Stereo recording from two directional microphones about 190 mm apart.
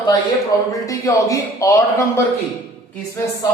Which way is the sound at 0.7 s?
15° left (ahead or behind).